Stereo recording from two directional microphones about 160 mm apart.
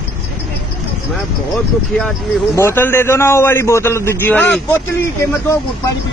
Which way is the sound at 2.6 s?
15° left (ahead or behind).